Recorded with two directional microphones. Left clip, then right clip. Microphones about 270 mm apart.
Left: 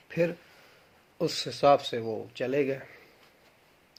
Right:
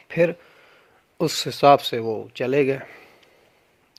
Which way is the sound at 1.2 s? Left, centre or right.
Right.